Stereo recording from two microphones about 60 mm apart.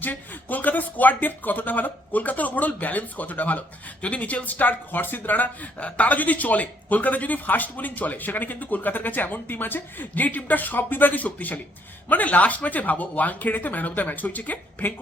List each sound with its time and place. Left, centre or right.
0.0 s speech: left